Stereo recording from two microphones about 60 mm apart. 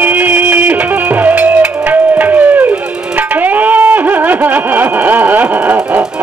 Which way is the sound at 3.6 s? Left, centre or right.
Right.